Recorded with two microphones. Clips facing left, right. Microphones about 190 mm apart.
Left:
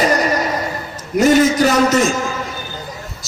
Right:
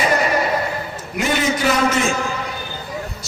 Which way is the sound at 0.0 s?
40° left (ahead or behind).